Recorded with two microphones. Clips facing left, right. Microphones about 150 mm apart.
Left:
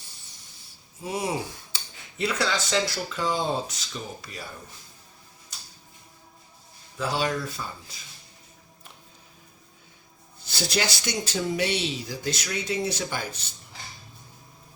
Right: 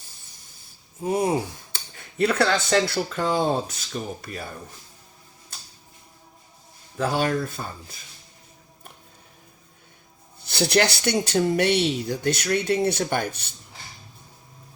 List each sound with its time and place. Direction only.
1.0 s speech: 50° right (ahead or behind)
6.9 s speech: 50° right (ahead or behind)
10.6 s speech: 60° right (ahead or behind)